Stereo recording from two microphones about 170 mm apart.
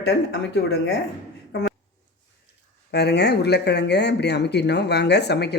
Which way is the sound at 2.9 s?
75° left (ahead or behind).